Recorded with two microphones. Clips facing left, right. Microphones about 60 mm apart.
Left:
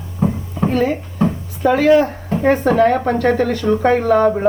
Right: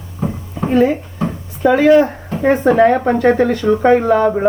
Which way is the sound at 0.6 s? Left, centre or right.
Centre.